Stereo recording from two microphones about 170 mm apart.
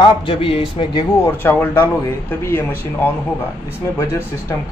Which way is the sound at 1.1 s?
15° left (ahead or behind).